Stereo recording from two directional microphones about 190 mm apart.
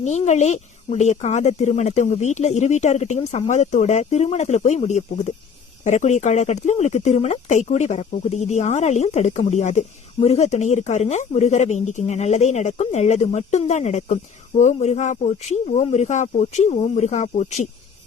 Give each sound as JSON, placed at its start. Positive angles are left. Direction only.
{"t": 0.0, "sound": "speech", "side_deg": 35}